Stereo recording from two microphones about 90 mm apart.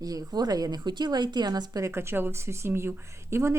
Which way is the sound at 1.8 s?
30° right (ahead or behind).